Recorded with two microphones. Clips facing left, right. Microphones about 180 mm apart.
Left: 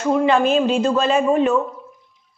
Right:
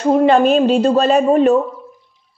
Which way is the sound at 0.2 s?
40° right (ahead or behind).